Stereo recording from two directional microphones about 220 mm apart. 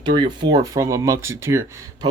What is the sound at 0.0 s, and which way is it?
Speech, 20° right (ahead or behind).